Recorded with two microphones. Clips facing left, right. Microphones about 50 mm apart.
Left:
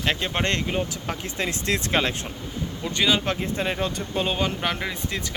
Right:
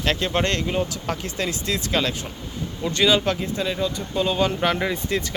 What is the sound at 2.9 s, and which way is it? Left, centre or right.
Speech, centre.